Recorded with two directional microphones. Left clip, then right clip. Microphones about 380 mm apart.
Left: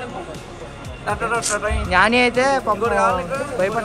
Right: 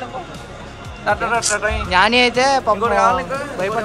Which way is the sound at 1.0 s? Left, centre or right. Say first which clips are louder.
Right 4 dB; right.